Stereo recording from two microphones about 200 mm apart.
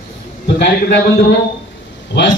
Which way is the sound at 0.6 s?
55° left (ahead or behind).